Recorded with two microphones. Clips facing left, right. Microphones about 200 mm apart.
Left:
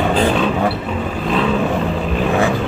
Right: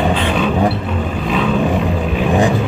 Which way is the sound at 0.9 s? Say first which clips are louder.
Right 1 dB; centre (ahead or behind).